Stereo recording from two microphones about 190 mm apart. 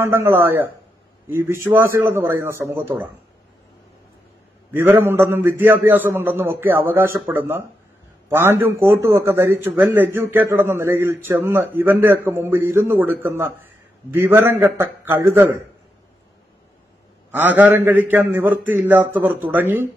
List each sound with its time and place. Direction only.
0.0 s a man's voice: 15° right (ahead or behind)
4.7 s a man's voice: 10° right (ahead or behind)
17.3 s a man's voice: 10° right (ahead or behind)